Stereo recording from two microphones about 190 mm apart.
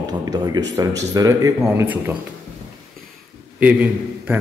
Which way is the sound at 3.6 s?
10° right (ahead or behind).